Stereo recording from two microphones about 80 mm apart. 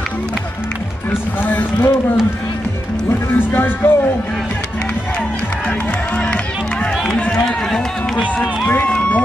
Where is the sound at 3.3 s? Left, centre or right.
Left.